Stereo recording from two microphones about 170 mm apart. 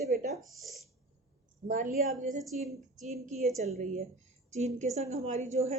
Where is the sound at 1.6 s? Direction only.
55° right (ahead or behind).